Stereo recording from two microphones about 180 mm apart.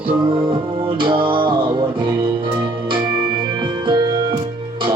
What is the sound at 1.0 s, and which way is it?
Music, 25° right (ahead or behind).